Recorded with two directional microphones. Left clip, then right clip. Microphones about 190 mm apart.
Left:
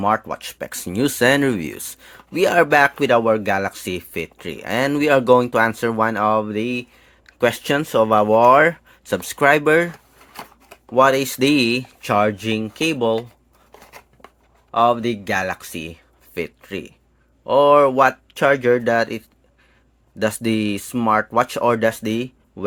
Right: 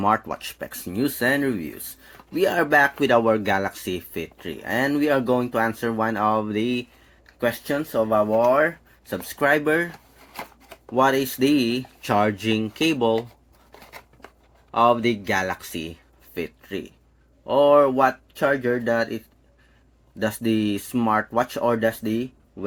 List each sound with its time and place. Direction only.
0.0 s speech: 20° left (ahead or behind); by 1.8 s 45° left (ahead or behind)
2.3 s speech: 35° left (ahead or behind); by 6.8 s 20° left (ahead or behind)
7.3 s speech: 45° left (ahead or behind)
10.9 s speech: 30° left (ahead or behind)
14.7 s speech: 20° left (ahead or behind); by 22.6 s 40° left (ahead or behind)